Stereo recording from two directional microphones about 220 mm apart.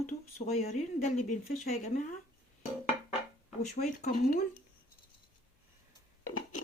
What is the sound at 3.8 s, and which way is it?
Speech, 35° left (ahead or behind).